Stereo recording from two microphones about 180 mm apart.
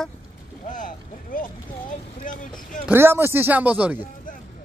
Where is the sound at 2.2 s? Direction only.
50° left (ahead or behind).